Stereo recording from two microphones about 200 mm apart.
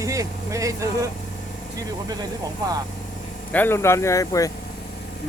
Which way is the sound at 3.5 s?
10° left (ahead or behind).